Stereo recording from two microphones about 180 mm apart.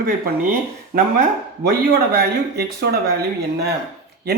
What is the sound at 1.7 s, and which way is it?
Speech, 60° right (ahead or behind).